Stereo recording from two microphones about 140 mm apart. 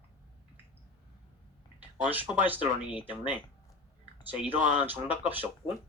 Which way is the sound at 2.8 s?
35° left (ahead or behind).